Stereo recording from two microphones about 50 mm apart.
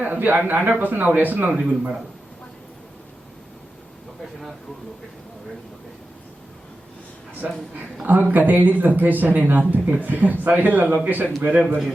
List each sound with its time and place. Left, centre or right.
0.0 s speech: right
1.6 s speech: right
7.4 s speech: right